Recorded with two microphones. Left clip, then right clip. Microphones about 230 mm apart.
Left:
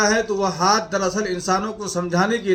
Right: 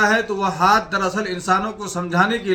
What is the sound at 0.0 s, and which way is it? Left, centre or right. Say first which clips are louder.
A man's voice: right 1 dB; centre.